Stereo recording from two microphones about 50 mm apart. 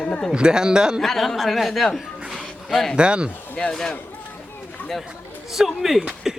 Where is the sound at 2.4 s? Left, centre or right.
Centre.